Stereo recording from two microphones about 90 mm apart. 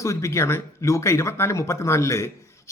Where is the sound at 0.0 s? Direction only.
35° left (ahead or behind).